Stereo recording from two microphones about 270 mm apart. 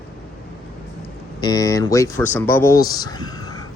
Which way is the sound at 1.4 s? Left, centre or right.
Centre.